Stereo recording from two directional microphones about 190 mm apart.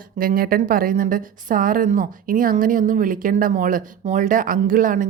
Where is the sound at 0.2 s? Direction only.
50° right (ahead or behind).